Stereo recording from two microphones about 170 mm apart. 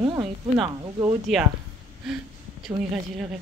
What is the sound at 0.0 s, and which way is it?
A woman's voice, 25° right (ahead or behind).